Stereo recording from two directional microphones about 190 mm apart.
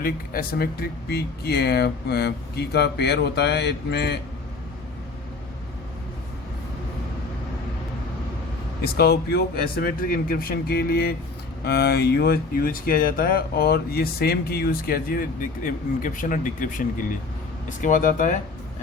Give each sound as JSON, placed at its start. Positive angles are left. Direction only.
{"t": 0.0, "sound": "speech", "side_deg": 50}
{"t": 8.8, "sound": "speech", "side_deg": 55}